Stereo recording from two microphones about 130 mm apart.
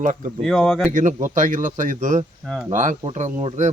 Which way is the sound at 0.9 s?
75° right (ahead or behind).